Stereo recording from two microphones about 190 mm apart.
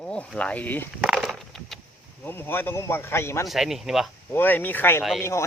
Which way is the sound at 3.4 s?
Centre (ahead or behind).